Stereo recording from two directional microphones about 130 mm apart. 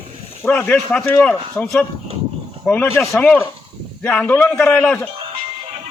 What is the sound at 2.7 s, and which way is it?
A man's voice, 20° left (ahead or behind).